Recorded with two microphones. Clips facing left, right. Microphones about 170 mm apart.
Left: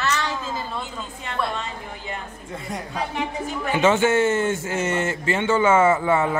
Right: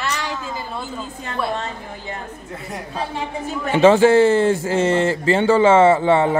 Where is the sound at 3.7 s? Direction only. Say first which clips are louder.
Right 7 dB; 35° right (ahead or behind).